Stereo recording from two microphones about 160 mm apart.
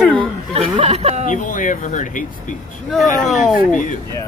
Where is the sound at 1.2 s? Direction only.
55° left (ahead or behind).